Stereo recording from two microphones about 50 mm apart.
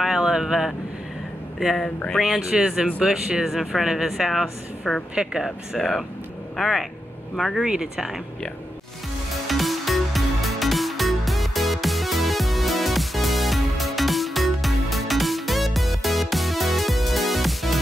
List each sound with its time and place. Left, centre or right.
0.0 s vehicle: centre
2.1 s speech: centre
2.5 s speech: centre
5.8 s speech: centre
7.6 s speech: centre
9.5 s music: centre